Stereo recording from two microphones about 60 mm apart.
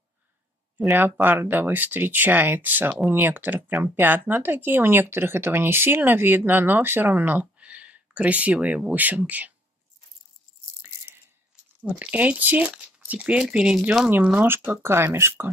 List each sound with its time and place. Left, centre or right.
0.9 s speech: right
11.8 s speech: right
13.4 s speech: centre
14.4 s speech: right